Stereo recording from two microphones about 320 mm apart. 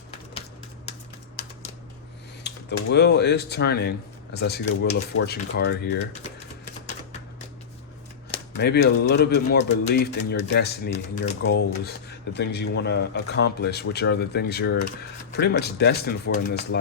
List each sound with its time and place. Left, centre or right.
2.4 s speech: left
6.8 s typewriter: left
8.5 s speech: left